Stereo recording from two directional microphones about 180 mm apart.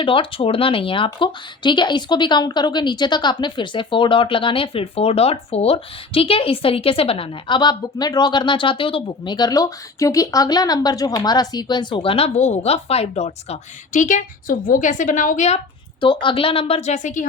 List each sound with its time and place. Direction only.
0.0 s speech: 30° left (ahead or behind)